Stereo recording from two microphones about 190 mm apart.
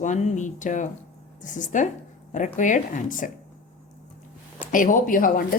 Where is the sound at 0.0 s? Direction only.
40° left (ahead or behind).